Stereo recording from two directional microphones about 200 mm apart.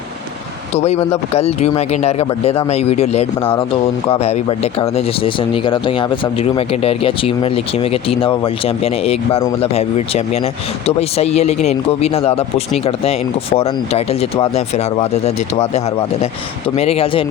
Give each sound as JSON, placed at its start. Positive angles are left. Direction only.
{"t": 0.8, "sound": "speech", "side_deg": 30}
{"t": 16.7, "sound": "speech", "side_deg": 30}